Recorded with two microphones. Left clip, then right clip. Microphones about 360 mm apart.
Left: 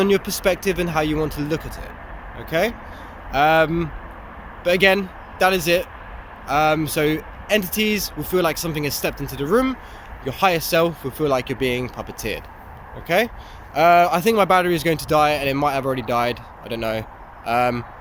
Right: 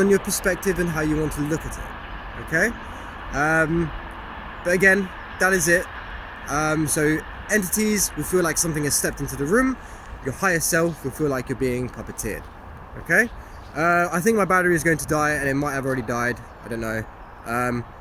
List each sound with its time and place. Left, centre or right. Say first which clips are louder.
0.0 s speech: left 1 dB; centre
9.0 s speech: left 2 dB; left
10.6 s speech: left 3 dB; centre
13.1 s speech: even; centre